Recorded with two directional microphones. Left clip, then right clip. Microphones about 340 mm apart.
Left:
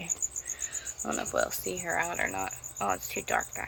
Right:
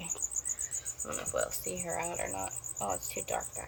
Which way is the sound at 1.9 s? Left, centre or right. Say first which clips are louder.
Left 7 dB; left.